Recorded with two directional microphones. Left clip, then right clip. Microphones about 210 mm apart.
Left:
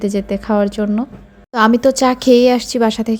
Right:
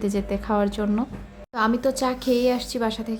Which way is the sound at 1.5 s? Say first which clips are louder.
Left 10 dB; 35° left (ahead or behind).